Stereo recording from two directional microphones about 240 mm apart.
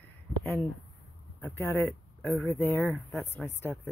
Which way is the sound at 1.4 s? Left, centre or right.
Centre.